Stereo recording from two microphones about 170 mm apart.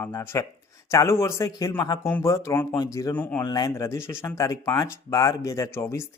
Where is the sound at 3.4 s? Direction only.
20° left (ahead or behind).